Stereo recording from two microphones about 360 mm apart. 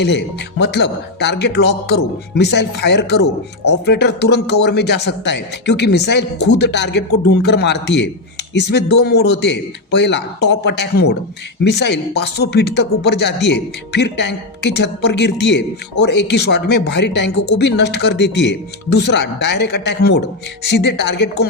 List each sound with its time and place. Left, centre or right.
0.0 s speech: left